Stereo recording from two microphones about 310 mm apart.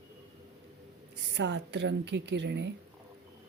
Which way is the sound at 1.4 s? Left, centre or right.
Right.